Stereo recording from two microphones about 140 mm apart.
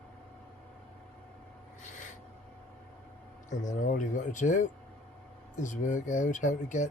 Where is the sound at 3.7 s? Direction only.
65° left (ahead or behind).